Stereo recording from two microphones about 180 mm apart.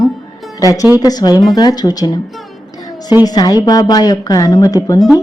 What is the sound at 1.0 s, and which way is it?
A woman's voice, 20° left (ahead or behind).